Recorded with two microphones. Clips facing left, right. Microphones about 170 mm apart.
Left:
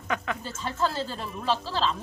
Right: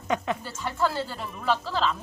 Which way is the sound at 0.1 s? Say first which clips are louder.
Right 3 dB; 20° right (ahead or behind).